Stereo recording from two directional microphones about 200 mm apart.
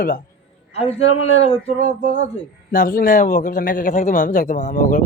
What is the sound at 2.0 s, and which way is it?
Speech, 40° right (ahead or behind).